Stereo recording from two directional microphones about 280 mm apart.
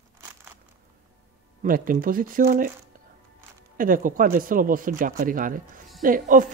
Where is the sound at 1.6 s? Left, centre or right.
Right.